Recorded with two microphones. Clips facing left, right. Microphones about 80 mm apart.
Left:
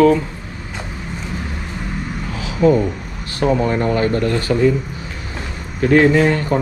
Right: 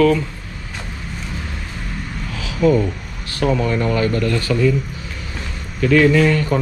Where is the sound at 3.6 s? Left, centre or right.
Left.